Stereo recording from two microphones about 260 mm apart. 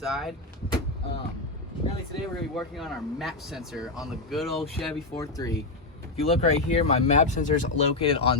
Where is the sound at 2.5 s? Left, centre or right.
Centre.